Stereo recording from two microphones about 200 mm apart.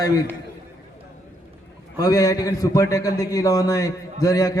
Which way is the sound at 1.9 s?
15° left (ahead or behind).